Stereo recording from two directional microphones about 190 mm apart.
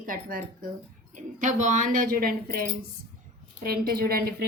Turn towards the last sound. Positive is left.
turn(degrees=-55)  # may be behind; listen again after turning